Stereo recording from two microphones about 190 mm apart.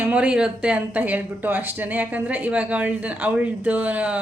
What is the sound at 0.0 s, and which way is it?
A woman's voice, 5° right (ahead or behind).